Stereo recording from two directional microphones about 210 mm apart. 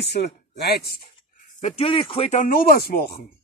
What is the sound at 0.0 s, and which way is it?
Speech, 55° left (ahead or behind).